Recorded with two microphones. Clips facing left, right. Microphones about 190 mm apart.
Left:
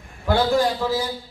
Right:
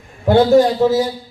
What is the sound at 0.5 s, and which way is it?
Speech, 20° right (ahead or behind).